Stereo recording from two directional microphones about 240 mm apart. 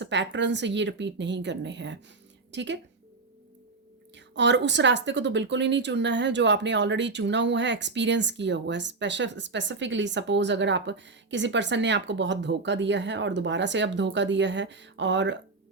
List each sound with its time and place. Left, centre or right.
0.0 s a woman's voice: right
4.1 s speech: right